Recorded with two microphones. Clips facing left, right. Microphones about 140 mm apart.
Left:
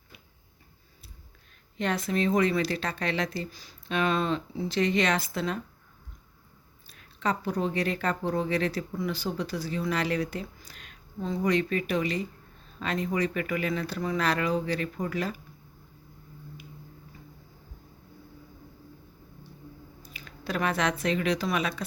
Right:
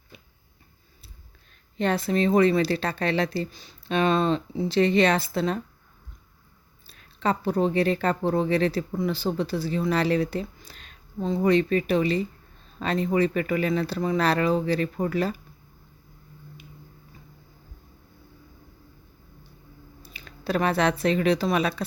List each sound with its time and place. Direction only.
1.8 s speech: 30° right (ahead or behind)
6.8 s speech: 30° right (ahead or behind)
20.0 s squish: 30° right (ahead or behind)
21.0 s speech: 35° right (ahead or behind)